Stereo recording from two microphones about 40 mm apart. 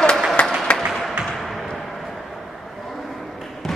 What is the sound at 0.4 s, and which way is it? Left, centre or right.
Applause, left.